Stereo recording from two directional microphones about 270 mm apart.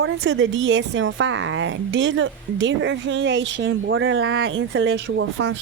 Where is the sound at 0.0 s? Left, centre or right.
Right.